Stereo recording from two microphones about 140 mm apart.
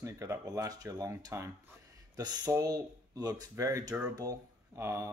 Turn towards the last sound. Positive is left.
turn(degrees=-20)  # may be behind; listen again after turning